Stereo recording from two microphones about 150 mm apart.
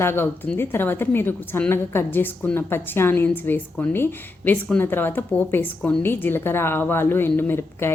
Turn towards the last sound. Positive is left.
turn(degrees=15)  # may be behind; listen again after turning